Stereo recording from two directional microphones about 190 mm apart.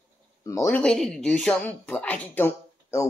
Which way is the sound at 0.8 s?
5° left (ahead or behind).